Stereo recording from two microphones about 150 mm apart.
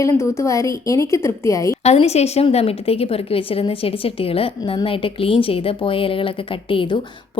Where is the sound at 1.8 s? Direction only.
45° left (ahead or behind).